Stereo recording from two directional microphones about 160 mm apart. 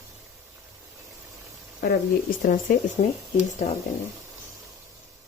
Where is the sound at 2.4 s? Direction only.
55° left (ahead or behind).